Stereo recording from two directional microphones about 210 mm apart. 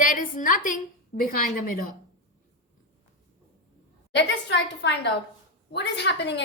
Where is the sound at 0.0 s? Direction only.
40° left (ahead or behind).